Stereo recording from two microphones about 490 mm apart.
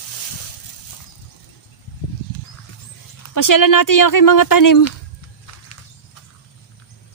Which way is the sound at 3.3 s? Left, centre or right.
Left.